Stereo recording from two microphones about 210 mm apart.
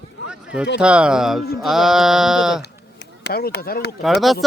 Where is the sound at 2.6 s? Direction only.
50° left (ahead or behind).